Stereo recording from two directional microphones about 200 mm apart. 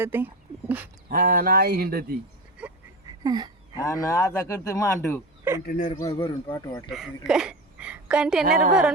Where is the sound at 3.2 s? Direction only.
20° right (ahead or behind).